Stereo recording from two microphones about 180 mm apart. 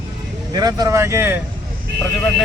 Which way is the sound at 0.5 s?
20° right (ahead or behind).